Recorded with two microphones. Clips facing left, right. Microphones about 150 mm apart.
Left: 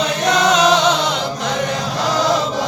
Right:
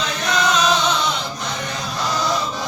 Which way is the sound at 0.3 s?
75° left (ahead or behind).